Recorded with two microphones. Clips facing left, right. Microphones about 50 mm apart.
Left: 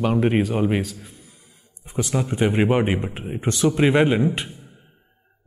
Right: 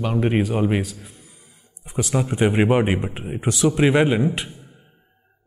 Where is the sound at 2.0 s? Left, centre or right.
Centre.